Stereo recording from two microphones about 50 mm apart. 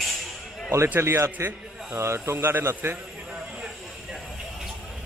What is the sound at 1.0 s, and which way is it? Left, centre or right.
A man's voice, right.